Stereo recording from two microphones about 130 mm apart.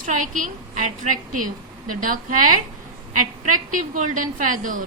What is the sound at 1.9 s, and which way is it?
A woman's voice, 90° right.